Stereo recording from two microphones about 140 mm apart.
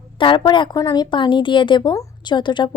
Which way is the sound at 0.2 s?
35° left (ahead or behind).